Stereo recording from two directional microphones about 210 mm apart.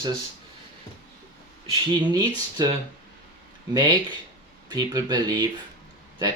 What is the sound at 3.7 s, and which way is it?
Speech, 20° right (ahead or behind).